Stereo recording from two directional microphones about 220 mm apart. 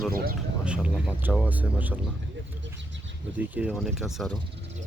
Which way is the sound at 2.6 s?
55° right (ahead or behind).